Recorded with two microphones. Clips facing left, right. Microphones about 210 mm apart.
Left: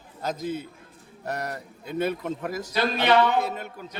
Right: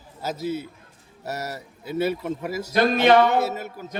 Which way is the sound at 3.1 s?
45° right (ahead or behind).